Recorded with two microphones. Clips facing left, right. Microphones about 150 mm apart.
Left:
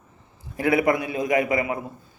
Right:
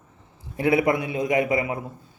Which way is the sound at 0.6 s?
25° right (ahead or behind).